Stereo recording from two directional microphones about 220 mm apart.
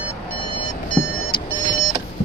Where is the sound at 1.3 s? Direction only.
20° left (ahead or behind).